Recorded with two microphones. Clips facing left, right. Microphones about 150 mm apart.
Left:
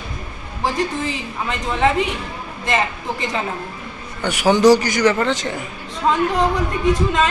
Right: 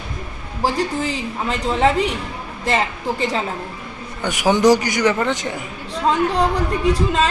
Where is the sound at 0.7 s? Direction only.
35° right (ahead or behind).